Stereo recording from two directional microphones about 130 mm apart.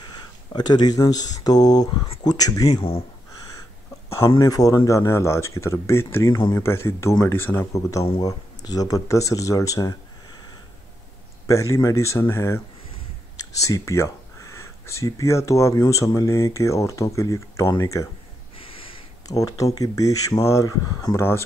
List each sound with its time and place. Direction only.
0.5 s speech: 30° left (ahead or behind)
2.7 s speech: 45° left (ahead or behind)
4.4 s speech: 30° left (ahead or behind)
11.4 s speech: 25° left (ahead or behind)
18.6 s a sound: 45° left (ahead or behind)
19.2 s speech: 25° left (ahead or behind)